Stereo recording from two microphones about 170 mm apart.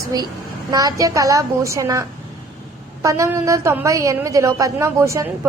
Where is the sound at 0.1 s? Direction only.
25° right (ahead or behind).